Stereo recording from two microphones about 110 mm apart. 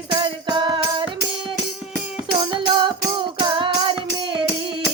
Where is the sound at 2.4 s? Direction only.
45° right (ahead or behind).